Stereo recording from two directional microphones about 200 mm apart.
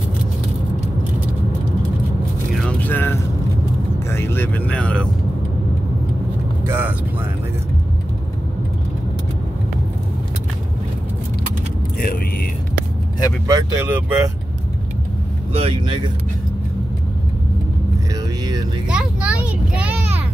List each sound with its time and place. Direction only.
2.6 s vehicle: 10° left (ahead or behind)
6.6 s vehicle: 10° right (ahead or behind)
13.5 s vehicle: 20° right (ahead or behind)
15.5 s vehicle: 25° right (ahead or behind)
18.9 s a sound: 5° right (ahead or behind)